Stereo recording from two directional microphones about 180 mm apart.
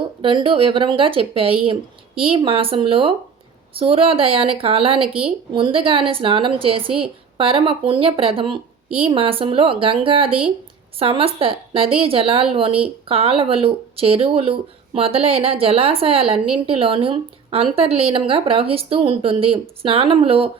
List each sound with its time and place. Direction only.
0.2 s speech: 30° right (ahead or behind)